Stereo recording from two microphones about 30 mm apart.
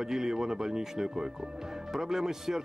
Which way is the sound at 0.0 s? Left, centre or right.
Centre.